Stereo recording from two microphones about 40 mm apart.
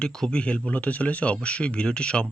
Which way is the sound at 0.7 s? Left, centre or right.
Left.